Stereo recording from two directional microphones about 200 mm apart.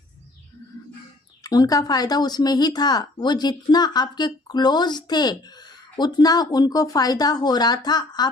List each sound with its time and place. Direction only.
1.5 s speech: 20° left (ahead or behind)